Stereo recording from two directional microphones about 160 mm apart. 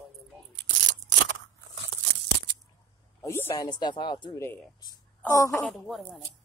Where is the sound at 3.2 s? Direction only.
15° left (ahead or behind).